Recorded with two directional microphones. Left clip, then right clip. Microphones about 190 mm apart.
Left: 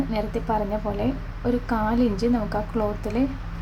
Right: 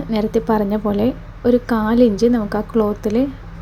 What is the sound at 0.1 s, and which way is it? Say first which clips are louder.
A woman's voice: right 7 dB; 25° right (ahead or behind).